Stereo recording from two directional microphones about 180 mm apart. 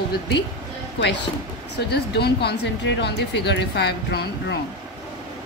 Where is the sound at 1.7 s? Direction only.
65° left (ahead or behind).